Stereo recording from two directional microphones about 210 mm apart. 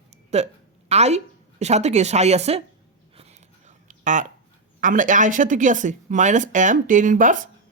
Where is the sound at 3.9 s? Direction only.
35° right (ahead or behind).